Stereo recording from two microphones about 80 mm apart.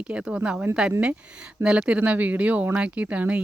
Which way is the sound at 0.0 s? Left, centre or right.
Centre.